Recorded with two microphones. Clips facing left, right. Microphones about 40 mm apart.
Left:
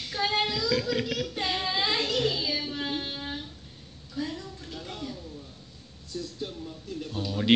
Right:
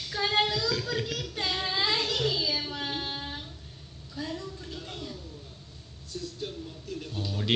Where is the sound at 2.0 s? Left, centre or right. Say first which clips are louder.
Left 1 dB; left.